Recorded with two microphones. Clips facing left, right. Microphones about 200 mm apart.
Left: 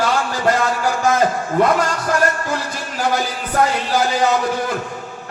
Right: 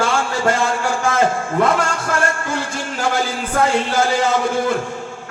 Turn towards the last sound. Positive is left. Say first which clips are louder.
# right 1 dB
turn(degrees=-25)  # may be behind; listen again after turning